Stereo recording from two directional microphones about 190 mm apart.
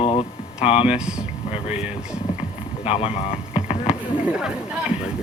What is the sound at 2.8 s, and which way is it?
Speech, 30° left (ahead or behind).